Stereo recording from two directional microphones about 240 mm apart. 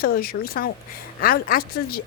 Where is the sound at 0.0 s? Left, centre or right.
Left.